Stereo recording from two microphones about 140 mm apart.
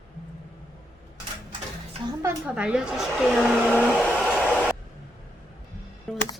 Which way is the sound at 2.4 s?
5° right (ahead or behind).